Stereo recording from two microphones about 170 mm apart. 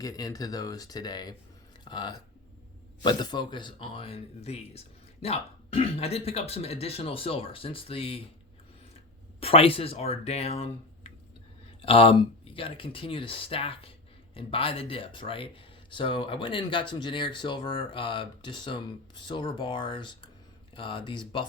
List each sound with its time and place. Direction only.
0.0 s speech: 20° left (ahead or behind)
9.4 s speech: 35° left (ahead or behind)